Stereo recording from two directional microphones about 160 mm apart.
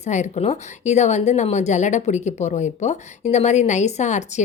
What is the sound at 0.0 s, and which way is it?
A woman's voice, 45° left (ahead or behind).